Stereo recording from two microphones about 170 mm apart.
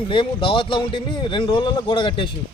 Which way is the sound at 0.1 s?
30° left (ahead or behind).